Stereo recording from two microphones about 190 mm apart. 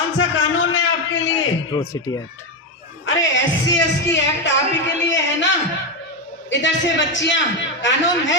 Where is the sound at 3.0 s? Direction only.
75° left (ahead or behind).